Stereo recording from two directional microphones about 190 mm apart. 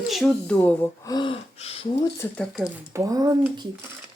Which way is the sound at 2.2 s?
5° left (ahead or behind).